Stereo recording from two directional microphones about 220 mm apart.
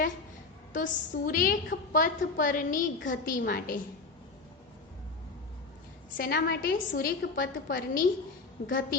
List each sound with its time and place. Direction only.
0.7 s a woman's voice: 35° left (ahead or behind)
6.1 s a woman's voice: 45° left (ahead or behind)